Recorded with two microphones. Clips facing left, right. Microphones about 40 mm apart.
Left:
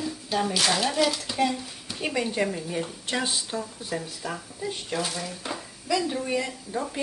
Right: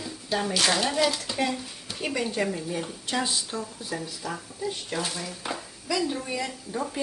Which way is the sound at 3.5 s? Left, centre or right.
Left.